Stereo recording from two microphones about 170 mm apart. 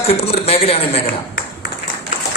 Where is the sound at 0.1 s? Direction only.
35° left (ahead or behind).